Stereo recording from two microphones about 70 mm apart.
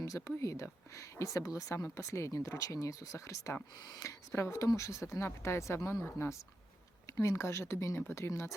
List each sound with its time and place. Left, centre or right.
0.3 s speech: left
3.8 s speech: left
4.0 s speech: left
7.1 s speech: left